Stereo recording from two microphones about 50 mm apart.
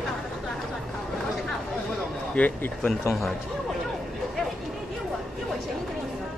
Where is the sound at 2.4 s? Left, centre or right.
Left.